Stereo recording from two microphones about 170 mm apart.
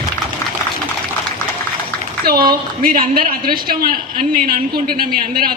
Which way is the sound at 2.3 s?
60° right (ahead or behind).